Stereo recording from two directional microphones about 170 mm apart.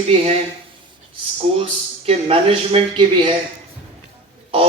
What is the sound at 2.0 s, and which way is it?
Speech, 35° right (ahead or behind).